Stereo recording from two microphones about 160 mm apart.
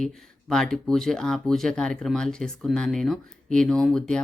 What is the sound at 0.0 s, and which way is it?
Speech, 5° left (ahead or behind).